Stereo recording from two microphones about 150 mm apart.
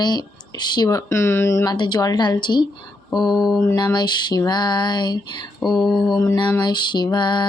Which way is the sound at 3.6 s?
25° left (ahead or behind).